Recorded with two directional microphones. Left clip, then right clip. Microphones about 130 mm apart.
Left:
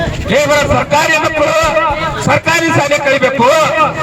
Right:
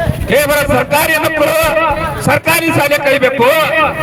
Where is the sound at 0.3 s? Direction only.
45° right (ahead or behind).